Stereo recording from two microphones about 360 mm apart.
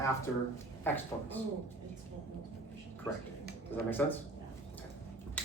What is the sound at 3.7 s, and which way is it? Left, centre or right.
Speech, centre.